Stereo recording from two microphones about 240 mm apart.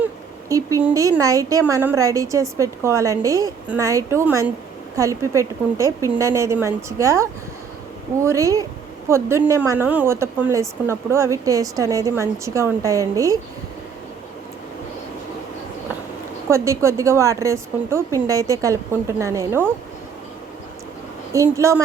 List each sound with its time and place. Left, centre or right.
0.0 s speech: centre
16.5 s speech: centre
21.3 s speech: centre